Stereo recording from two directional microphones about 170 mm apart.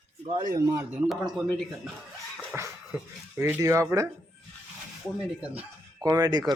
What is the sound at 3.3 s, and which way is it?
Speech, 15° right (ahead or behind).